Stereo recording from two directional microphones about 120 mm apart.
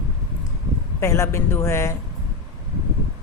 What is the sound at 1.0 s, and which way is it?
Speech, 20° left (ahead or behind).